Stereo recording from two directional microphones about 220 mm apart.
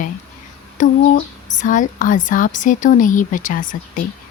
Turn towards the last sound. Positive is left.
turn(degrees=35)  # may be behind; listen again after turning